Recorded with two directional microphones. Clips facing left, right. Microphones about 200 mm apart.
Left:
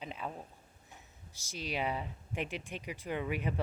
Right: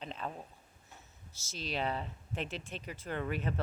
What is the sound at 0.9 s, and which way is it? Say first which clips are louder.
Speech: right 1 dB; 15° left (ahead or behind).